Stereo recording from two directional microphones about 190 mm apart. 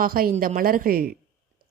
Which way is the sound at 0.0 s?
50° right (ahead or behind).